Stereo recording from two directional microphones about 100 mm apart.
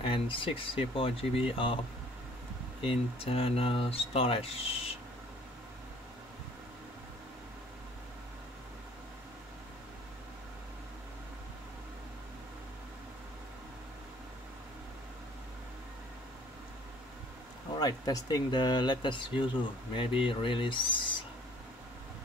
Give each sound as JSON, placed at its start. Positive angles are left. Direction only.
{"t": 0.0, "sound": "speech", "side_deg": 60}
{"t": 2.8, "sound": "speech", "side_deg": 70}
{"t": 17.7, "sound": "speech", "side_deg": 40}